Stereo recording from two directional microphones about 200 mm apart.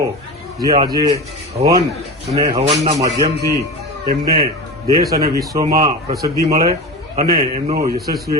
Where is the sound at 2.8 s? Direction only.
35° right (ahead or behind).